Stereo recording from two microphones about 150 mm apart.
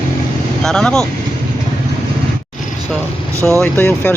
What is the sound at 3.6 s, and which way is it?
Speech, 15° left (ahead or behind).